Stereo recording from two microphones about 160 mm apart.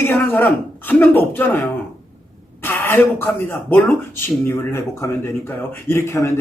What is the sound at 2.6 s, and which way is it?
A woman's voice, 15° left (ahead or behind).